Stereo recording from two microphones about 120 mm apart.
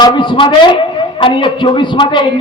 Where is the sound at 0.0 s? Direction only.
40° left (ahead or behind).